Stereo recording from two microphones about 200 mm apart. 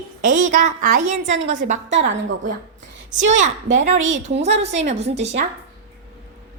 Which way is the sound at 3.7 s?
35° right (ahead or behind).